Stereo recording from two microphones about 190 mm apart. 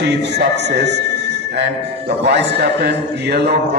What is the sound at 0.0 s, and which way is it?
A man's voice, 65° right (ahead or behind).